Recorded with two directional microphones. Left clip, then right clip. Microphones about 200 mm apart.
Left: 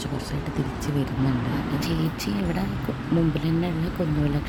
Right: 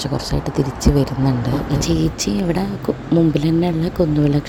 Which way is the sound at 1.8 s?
30° right (ahead or behind).